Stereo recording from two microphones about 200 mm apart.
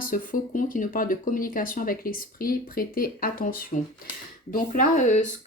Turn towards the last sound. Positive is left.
turn(degrees=40)  # may be behind; listen again after turning